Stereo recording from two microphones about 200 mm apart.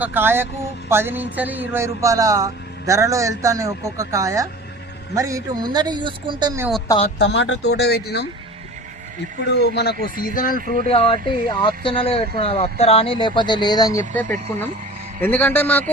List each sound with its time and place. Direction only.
0.0 s speech: 10° right (ahead or behind)
7.2 s speech: 60° left (ahead or behind)
9.6 s speech: 55° left (ahead or behind)
10.8 s speech: 30° left (ahead or behind)
14.1 s a man's voice: 10° left (ahead or behind)